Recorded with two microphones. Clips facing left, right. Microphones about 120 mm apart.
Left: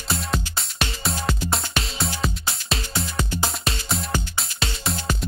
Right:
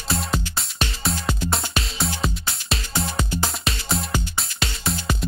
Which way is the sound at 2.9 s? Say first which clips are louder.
Right 3 dB; centre (ahead or behind).